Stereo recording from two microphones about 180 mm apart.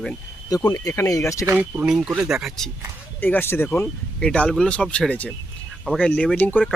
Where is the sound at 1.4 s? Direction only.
10° right (ahead or behind).